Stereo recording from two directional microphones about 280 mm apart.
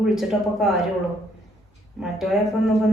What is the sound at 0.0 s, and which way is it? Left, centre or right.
Speech, centre.